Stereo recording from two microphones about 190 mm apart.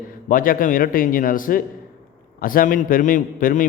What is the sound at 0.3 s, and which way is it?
A man's voice, 45° left (ahead or behind).